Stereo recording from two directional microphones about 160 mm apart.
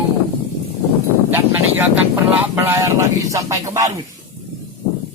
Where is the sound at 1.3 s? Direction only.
10° right (ahead or behind).